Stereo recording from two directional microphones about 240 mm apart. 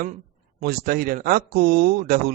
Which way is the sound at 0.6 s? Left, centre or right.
Right.